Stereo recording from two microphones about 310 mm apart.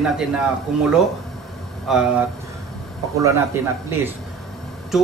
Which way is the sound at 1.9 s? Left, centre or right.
Centre.